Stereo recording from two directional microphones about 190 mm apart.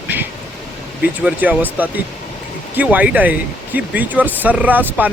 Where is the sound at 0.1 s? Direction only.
10° right (ahead or behind).